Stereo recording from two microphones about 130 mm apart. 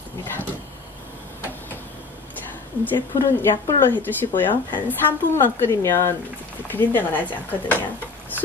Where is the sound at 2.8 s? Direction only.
15° left (ahead or behind).